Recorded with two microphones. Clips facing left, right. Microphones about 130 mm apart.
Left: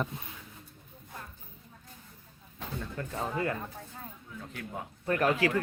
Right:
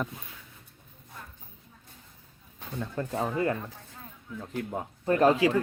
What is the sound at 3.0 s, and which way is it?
A woman's voice, 25° right (ahead or behind).